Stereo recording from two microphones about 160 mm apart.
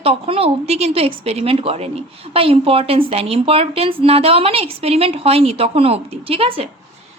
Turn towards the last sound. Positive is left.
turn(degrees=-35)  # may be behind; listen again after turning